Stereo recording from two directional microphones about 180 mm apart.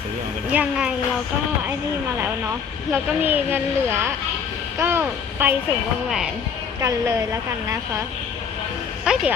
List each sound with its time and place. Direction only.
0.5 s speech: 5° right (ahead or behind)
2.9 s speech: 10° right (ahead or behind)
6.8 s speech: 15° right (ahead or behind)
9.1 s a sound: 5° right (ahead or behind)